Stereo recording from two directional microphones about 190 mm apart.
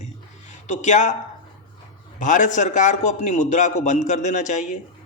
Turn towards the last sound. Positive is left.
turn(degrees=40)  # may be behind; listen again after turning